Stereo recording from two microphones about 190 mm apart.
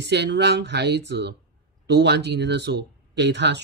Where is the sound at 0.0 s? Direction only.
65° right (ahead or behind).